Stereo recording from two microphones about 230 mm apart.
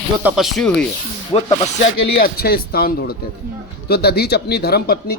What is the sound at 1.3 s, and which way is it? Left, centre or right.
Speech, left.